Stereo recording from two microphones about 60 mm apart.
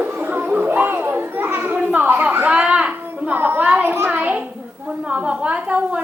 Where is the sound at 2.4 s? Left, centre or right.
Right.